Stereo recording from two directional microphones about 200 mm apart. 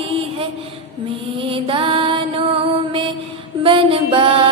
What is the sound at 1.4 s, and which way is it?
Mantra, 25° right (ahead or behind).